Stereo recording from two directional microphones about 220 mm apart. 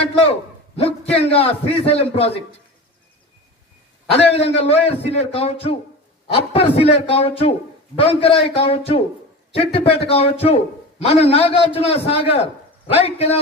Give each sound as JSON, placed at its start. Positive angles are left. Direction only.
{"t": 0.8, "sound": "a man's voice", "side_deg": 25}
{"t": 4.1, "sound": "a man's voice", "side_deg": 25}